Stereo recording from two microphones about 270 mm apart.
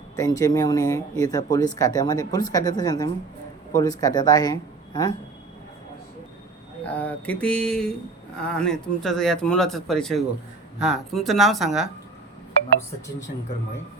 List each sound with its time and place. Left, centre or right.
0.2 s speech: centre
6.8 s speech: centre